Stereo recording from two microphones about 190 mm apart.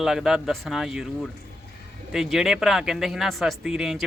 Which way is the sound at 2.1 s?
Centre (ahead or behind).